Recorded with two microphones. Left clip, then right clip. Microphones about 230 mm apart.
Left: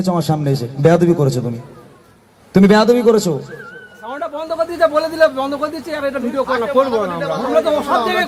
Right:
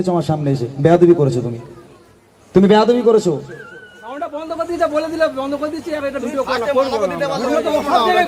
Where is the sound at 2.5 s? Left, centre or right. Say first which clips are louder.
Even; left.